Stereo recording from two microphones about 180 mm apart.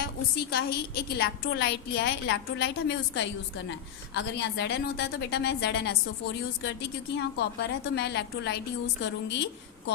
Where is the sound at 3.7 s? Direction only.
70° left (ahead or behind).